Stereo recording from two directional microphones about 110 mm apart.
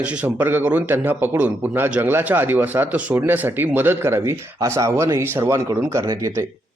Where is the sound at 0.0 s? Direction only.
10° right (ahead or behind).